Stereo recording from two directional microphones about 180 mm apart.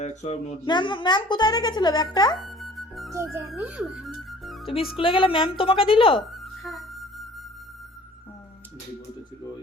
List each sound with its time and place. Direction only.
0.0 s speech: 40° left (ahead or behind)
0.6 s speech: 25° left (ahead or behind)
2.4 s music: centre (ahead or behind)
3.4 s speech: 5° right (ahead or behind)
4.9 s speech: 30° left (ahead or behind)
6.1 s music: centre (ahead or behind)